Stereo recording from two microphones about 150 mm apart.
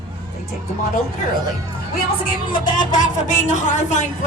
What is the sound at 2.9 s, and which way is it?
Speech, 55° left (ahead or behind).